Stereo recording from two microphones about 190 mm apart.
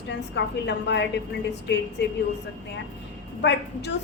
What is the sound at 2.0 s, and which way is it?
Speech, 60° left (ahead or behind).